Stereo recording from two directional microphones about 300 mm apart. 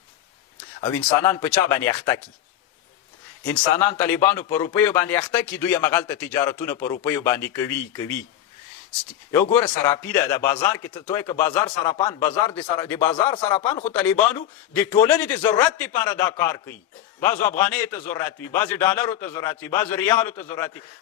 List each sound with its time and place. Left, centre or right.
0.8 s a man's voice: centre
3.4 s a man's voice: centre
6.7 s speech: left
7.0 s a man's voice: centre
9.3 s a man's voice: centre
13.8 s a man's voice: centre